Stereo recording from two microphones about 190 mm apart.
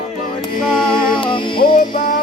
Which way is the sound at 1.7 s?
45° left (ahead or behind).